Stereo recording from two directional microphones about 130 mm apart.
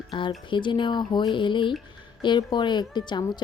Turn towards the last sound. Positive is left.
turn(degrees=35)  # may be behind; listen again after turning